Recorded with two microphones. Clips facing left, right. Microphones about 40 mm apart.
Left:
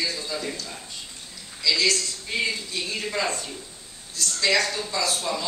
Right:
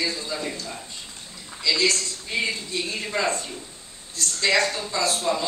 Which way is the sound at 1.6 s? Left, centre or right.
Right.